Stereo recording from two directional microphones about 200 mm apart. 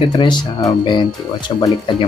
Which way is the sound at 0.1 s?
20° left (ahead or behind).